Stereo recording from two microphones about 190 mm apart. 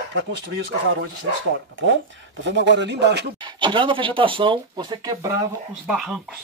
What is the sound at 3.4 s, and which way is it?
Speech, 25° right (ahead or behind).